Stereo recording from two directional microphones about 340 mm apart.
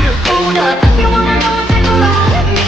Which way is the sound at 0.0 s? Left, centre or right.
Centre.